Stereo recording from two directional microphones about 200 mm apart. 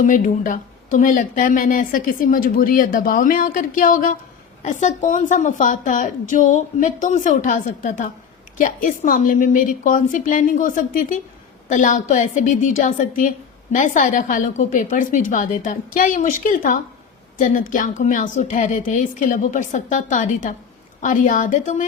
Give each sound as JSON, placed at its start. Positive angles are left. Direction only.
{"t": 0.0, "sound": "a woman's voice", "side_deg": 40}